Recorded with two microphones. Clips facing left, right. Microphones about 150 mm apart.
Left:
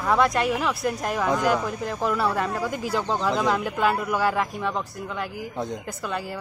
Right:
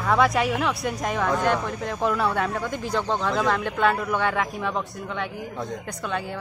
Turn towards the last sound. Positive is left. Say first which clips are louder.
# right 1 dB
turn(degrees=0)  # may be behind; listen again after turning